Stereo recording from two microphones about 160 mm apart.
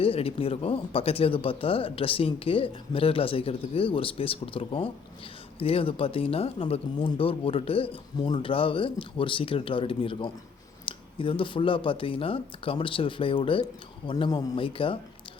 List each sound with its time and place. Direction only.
0.0 s speech: 35° left (ahead or behind)